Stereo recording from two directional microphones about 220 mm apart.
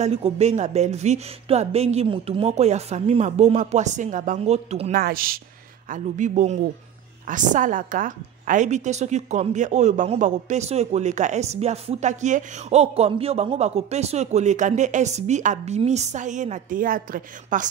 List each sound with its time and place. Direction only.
0.0 s speech: 30° right (ahead or behind)
4.9 s a woman's voice: 40° right (ahead or behind)